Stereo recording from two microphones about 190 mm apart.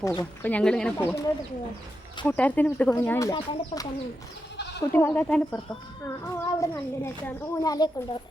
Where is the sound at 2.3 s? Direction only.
10° left (ahead or behind).